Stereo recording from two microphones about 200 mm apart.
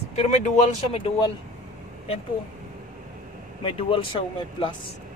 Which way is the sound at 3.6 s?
25° left (ahead or behind).